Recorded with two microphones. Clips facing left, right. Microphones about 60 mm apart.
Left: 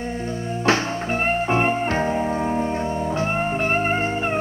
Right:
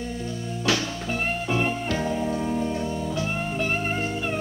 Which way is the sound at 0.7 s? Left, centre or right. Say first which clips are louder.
Left 5 dB; left.